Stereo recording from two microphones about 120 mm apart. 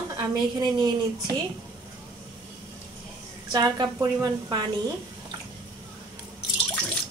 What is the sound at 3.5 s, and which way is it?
A woman's voice, 30° right (ahead or behind).